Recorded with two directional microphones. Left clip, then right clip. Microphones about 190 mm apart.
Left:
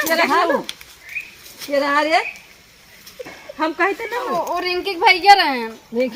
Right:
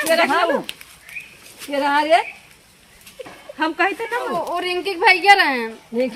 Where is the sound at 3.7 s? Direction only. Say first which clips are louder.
Even; 20° right (ahead or behind).